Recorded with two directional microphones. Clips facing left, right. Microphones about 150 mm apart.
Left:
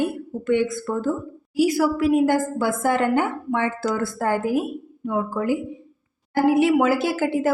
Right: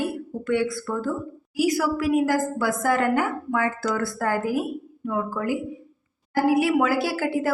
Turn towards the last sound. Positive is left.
turn(degrees=20)  # may be behind; listen again after turning